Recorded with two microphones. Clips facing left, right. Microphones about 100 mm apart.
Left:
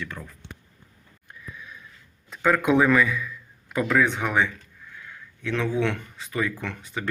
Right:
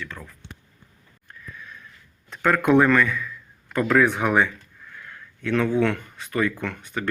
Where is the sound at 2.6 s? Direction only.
Centre (ahead or behind).